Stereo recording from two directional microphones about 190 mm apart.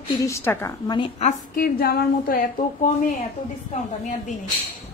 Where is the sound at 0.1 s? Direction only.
15° left (ahead or behind).